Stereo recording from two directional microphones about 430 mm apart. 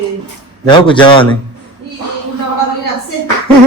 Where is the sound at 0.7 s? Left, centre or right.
Centre.